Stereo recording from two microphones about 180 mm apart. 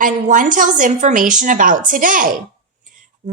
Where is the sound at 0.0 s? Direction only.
45° right (ahead or behind).